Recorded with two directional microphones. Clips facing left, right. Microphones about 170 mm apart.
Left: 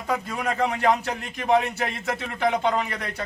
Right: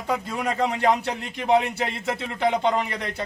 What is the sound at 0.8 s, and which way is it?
Speech, 20° right (ahead or behind).